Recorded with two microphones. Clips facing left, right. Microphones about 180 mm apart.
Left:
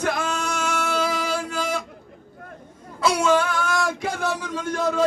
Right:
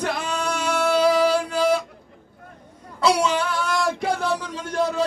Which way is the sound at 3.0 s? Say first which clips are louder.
Left 1 dB; 50° left (ahead or behind).